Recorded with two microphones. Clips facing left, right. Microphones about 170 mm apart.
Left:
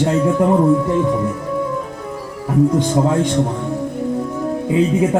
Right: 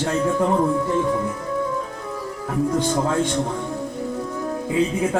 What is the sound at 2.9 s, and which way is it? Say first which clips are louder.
Speech: left 5 dB; 20° left (ahead or behind).